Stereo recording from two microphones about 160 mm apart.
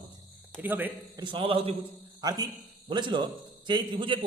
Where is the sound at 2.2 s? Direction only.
25° right (ahead or behind).